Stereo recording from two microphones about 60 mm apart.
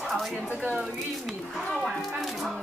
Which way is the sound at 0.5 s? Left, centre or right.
Left.